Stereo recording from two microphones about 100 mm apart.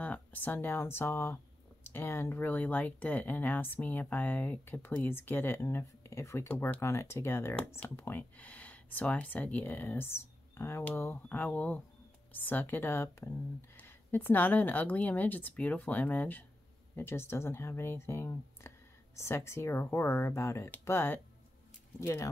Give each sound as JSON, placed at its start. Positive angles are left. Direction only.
{"t": 0.0, "sound": "speech", "side_deg": 15}